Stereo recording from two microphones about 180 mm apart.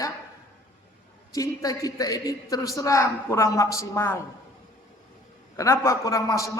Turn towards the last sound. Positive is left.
turn(degrees=20)  # may be behind; listen again after turning